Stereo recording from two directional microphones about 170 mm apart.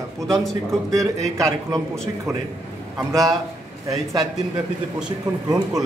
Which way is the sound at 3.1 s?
20° right (ahead or behind).